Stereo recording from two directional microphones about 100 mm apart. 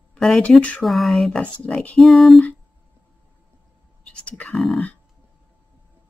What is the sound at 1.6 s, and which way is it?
Speech, 15° left (ahead or behind).